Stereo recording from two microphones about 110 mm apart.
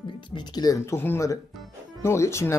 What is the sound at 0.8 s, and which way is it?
Speech, 20° left (ahead or behind).